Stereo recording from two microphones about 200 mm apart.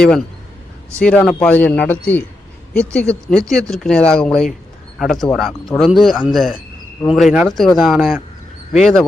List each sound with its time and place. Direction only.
0.9 s speech: 5° left (ahead or behind)